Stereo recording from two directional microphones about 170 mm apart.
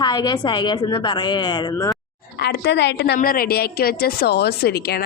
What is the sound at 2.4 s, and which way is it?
Speech, 70° left (ahead or behind).